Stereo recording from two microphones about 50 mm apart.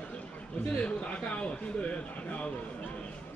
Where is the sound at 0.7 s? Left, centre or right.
Left.